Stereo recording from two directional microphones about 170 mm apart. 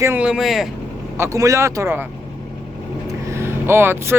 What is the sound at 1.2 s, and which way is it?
Speech, 20° right (ahead or behind).